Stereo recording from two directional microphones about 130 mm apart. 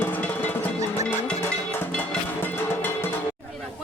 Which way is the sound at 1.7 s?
15° left (ahead or behind).